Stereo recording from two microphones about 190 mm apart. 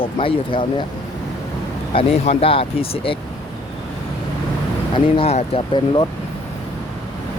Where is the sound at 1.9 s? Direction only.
30° left (ahead or behind).